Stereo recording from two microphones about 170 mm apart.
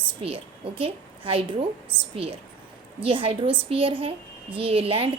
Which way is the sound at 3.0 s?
35° right (ahead or behind).